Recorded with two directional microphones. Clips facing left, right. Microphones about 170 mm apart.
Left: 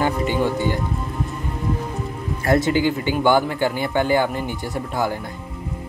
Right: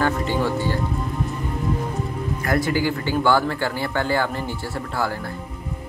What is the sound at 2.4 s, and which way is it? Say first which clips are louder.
Speech: left 4 dB; 25° left (ahead or behind).